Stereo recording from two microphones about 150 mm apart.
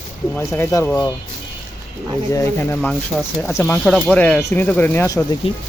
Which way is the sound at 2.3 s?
20° left (ahead or behind).